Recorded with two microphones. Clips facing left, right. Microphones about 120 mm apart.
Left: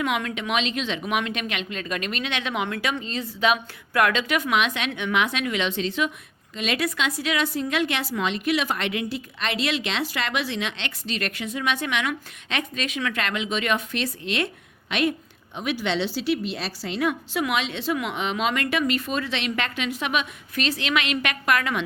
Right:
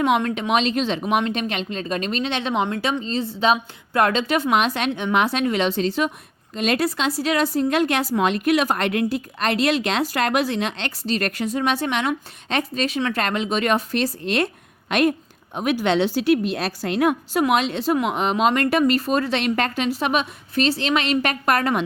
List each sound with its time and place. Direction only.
0.0 s a woman's voice: 35° right (ahead or behind)